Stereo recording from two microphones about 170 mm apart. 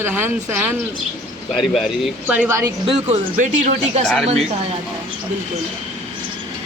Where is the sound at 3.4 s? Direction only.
45° right (ahead or behind).